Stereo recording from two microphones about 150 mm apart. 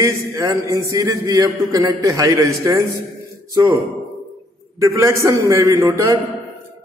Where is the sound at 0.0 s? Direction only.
20° right (ahead or behind).